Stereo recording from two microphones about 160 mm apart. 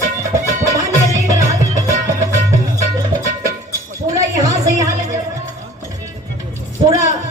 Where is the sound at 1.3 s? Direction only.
20° right (ahead or behind).